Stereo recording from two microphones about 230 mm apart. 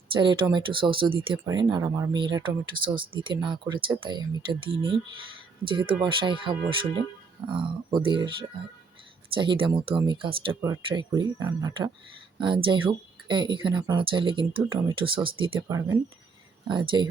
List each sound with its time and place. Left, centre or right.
0.1 s speech: right